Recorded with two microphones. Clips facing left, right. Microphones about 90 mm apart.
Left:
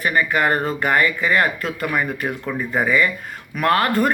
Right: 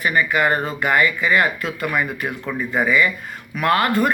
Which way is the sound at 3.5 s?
40° left (ahead or behind).